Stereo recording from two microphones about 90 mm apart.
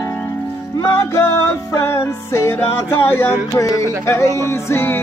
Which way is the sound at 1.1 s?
30° left (ahead or behind).